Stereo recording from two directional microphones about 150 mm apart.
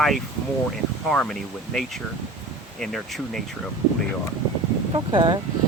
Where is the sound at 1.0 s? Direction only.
5° left (ahead or behind).